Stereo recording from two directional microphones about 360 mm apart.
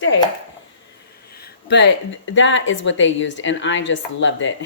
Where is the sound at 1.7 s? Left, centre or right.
Left.